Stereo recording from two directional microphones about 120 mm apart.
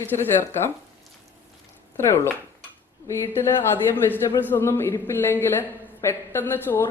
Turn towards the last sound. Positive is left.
turn(degrees=20)  # may be behind; listen again after turning